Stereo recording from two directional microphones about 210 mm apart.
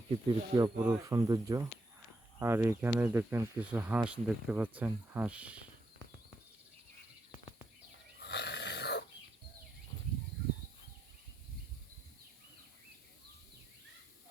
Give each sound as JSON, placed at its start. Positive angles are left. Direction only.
{"t": 0.3, "sound": "speech", "side_deg": -20}
{"t": 8.2, "sound": "dog", "side_deg": 55}